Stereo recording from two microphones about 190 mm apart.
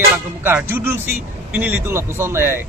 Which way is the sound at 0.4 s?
10° right (ahead or behind).